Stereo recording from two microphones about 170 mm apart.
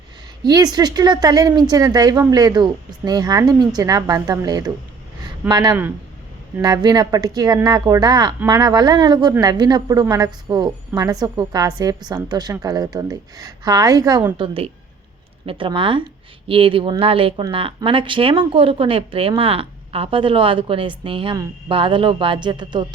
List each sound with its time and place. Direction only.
0.4 s speech: 25° right (ahead or behind)
14.3 s speech: 30° right (ahead or behind)